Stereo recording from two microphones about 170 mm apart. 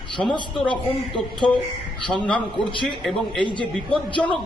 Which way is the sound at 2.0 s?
5° left (ahead or behind).